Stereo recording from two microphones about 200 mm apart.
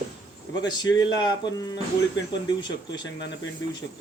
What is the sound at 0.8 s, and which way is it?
Speech, 20° left (ahead or behind).